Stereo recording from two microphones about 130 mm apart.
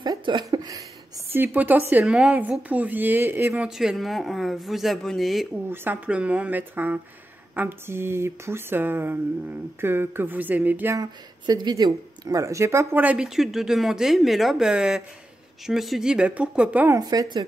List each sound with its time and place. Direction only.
0.0 s a sound: 35° right (ahead or behind)
1.3 s speech: 15° right (ahead or behind)
3.6 s speech: 5° right (ahead or behind)
5.7 s speech: 10° right (ahead or behind)
11.0 s speech: 35° right (ahead or behind); by 16.9 s 10° right (ahead or behind)
16.9 s a woman's voice: 30° right (ahead or behind)